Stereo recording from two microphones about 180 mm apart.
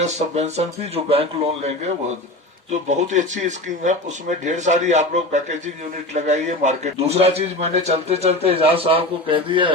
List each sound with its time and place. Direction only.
0.0 s a man's voice: 40° right (ahead or behind)
2.9 s a man's voice: 40° right (ahead or behind)